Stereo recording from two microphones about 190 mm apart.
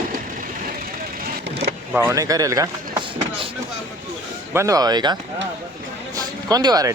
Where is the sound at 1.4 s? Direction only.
65° right (ahead or behind).